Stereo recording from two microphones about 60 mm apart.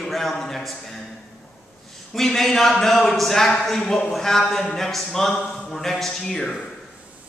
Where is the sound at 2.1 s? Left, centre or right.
Centre.